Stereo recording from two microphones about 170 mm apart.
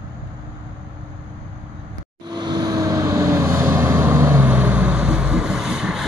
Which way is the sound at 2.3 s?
25° right (ahead or behind).